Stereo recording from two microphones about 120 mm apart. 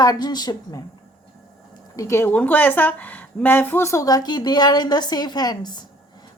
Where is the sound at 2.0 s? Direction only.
20° left (ahead or behind).